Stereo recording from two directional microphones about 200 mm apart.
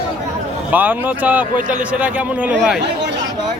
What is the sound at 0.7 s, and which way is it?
A man's voice, 10° right (ahead or behind).